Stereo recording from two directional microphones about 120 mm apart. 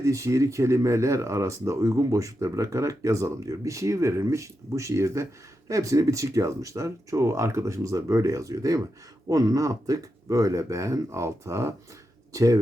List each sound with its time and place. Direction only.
0.0 s speech: 25° right (ahead or behind)